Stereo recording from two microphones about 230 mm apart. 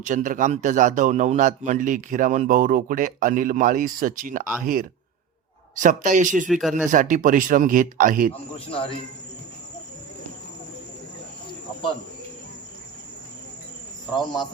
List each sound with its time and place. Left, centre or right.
0.0 s a man's voice: right
6.5 s speech: centre
6.9 s a man's voice: right
8.5 s speech: left
14.1 s speech: centre